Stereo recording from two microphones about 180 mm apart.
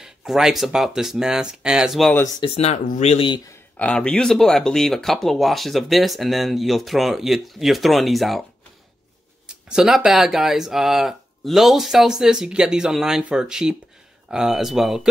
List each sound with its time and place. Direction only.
0.0 s speech: 5° right (ahead or behind)
2.5 s speech: 35° left (ahead or behind)
3.7 s speech: 5° left (ahead or behind)
9.7 s speech: 5° right (ahead or behind)